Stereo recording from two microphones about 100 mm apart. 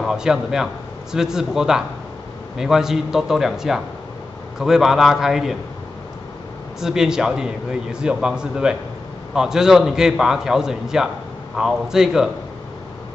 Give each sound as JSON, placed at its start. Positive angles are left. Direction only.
{"t": 0.0, "sound": "a man's voice", "side_deg": -5}
{"t": 6.8, "sound": "a man's voice", "side_deg": -5}